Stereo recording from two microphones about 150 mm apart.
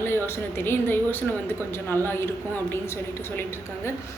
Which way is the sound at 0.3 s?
15° left (ahead or behind).